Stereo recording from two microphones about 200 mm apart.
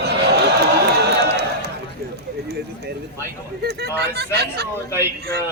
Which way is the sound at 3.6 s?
55° right (ahead or behind).